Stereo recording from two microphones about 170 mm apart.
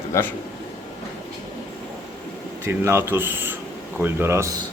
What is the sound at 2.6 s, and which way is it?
Speech, 15° right (ahead or behind).